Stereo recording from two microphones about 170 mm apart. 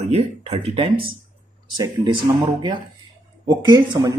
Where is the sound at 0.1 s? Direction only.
40° right (ahead or behind).